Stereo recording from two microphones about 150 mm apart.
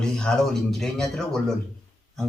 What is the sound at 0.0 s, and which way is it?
A man's voice, 5° left (ahead or behind).